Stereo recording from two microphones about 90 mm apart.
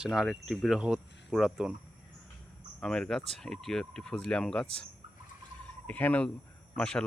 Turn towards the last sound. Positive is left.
turn(degrees=10)  # may be behind; listen again after turning